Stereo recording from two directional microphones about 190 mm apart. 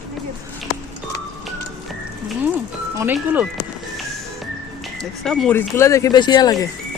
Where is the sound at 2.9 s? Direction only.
10° right (ahead or behind).